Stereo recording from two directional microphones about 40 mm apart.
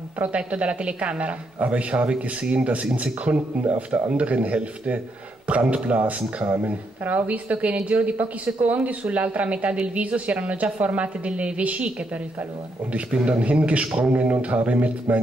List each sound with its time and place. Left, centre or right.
0.3 s a woman's voice: right
12.9 s a woman's voice: right